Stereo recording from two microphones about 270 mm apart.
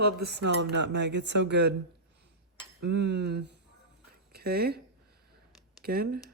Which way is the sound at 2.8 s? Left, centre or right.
Right.